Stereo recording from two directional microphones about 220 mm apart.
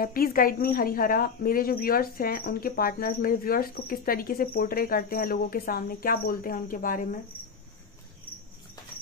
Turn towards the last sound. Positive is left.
turn(degrees=40)  # may be behind; listen again after turning